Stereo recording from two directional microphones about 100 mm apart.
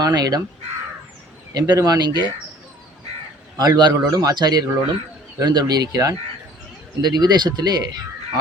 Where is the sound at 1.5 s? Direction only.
35° right (ahead or behind).